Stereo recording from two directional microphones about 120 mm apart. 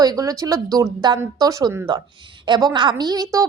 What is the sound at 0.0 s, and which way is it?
Speech, 30° right (ahead or behind).